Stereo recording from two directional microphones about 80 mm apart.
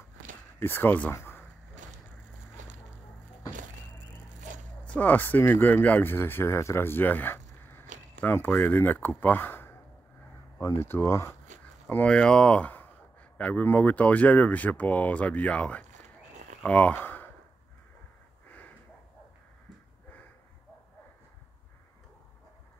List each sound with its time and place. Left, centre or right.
0.6 s speech: left
1.1 s a sound: left
4.8 s speech: centre
11.9 s speech: centre